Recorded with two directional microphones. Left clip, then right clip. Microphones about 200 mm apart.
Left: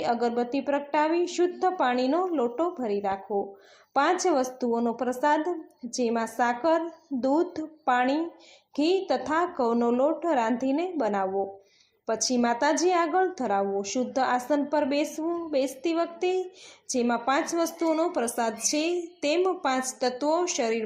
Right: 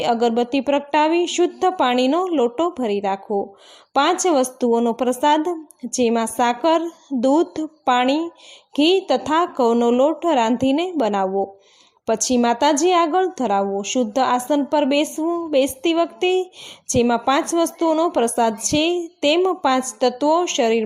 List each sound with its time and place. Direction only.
0.0 s a woman's voice: 45° right (ahead or behind)